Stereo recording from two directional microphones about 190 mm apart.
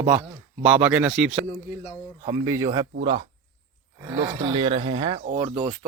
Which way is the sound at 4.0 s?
20° right (ahead or behind).